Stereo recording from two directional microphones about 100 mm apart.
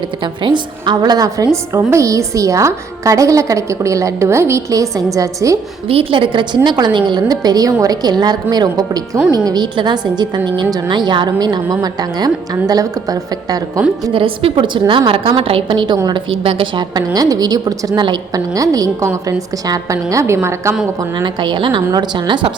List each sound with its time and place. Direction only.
0.2 s a woman's voice: 50° right (ahead or behind); by 5.5 s 35° right (ahead or behind)
5.9 s a woman's voice: 65° right (ahead or behind); by 13.6 s 35° right (ahead or behind)
14.1 s a woman's voice: 60° right (ahead or behind)
17.2 s a woman's voice: 40° right (ahead or behind)
21.2 s a woman's voice: 50° right (ahead or behind)